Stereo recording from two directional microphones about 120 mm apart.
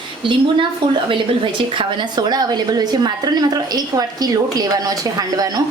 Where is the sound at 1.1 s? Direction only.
45° right (ahead or behind).